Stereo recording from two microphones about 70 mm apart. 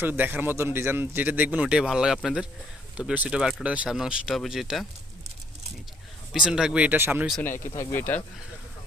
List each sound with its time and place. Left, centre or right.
0.0 s speech: right
1.9 s speech: centre
3.9 s speech: centre
6.3 s speech: centre
6.9 s speech: right
7.6 s speech: left
7.9 s speech: left